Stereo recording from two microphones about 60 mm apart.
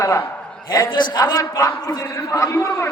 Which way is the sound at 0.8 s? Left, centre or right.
Left.